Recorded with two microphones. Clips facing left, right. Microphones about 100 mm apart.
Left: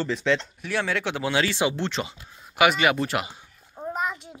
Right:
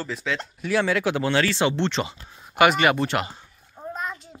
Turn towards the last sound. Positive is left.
turn(degrees=10)  # may be behind; listen again after turning